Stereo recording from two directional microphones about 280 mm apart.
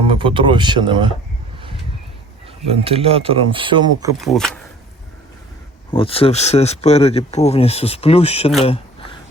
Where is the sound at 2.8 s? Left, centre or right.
Right.